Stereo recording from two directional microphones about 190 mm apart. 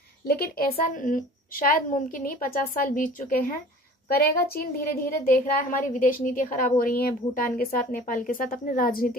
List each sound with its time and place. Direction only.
0.3 s a woman's voice: 50° left (ahead or behind)